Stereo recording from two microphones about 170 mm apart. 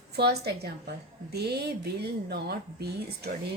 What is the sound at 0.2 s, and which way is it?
A woman's voice, 70° right (ahead or behind).